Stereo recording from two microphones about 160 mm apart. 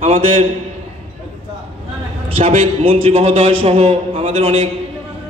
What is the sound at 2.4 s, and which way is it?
A man's voice, 45° right (ahead or behind).